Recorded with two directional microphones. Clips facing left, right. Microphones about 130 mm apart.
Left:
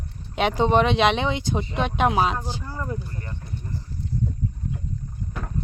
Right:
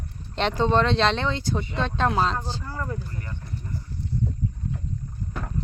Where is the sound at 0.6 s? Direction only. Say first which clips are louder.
Left 2 dB; 15° left (ahead or behind).